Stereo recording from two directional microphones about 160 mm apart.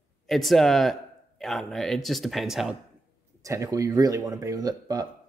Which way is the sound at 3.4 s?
20° right (ahead or behind).